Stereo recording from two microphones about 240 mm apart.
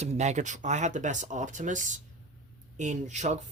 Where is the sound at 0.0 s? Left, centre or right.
Right.